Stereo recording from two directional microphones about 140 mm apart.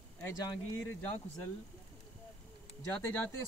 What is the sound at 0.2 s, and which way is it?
Speech, 25° left (ahead or behind).